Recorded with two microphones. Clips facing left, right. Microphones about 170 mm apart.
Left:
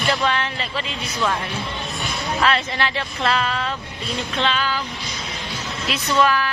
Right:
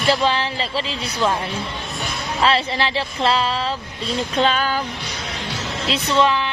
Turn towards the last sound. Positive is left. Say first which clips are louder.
# right 1 dB
turn(degrees=-25)  # may be behind; listen again after turning